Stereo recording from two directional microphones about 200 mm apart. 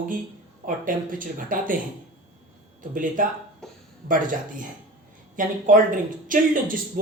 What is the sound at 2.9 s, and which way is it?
Speech, 40° right (ahead or behind).